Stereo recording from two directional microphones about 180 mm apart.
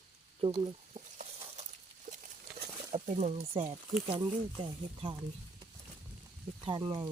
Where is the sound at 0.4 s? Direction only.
25° right (ahead or behind).